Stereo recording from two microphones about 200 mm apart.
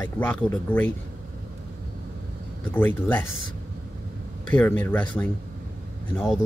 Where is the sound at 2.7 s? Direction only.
10° left (ahead or behind).